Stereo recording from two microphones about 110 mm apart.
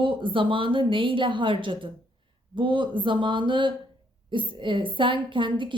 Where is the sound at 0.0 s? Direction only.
50° right (ahead or behind).